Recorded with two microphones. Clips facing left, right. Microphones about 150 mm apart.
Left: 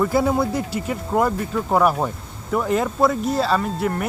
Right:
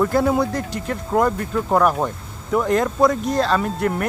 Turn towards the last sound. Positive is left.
turn(degrees=0)  # may be behind; listen again after turning